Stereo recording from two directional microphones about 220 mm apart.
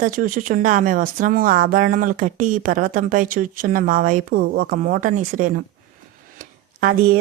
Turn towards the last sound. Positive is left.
turn(degrees=-40)  # may be behind; listen again after turning